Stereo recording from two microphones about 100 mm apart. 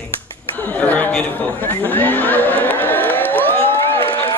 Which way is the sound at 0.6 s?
15° left (ahead or behind).